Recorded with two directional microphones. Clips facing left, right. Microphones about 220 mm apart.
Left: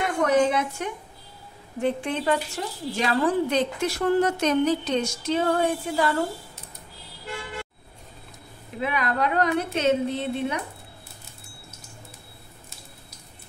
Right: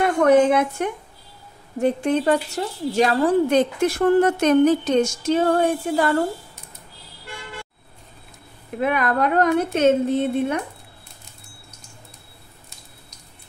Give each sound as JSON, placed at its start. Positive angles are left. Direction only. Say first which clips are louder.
{"t": 0.2, "sound": "a woman's voice", "louder": "right 5 dB", "side_deg": -55}
{"t": 1.8, "sound": "a woman's voice", "louder": "right 6 dB", "side_deg": -45}
{"t": 8.7, "sound": "a woman's voice", "louder": "right 5 dB", "side_deg": -50}